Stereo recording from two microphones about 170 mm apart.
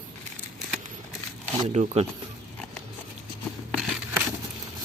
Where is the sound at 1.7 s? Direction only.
40° right (ahead or behind).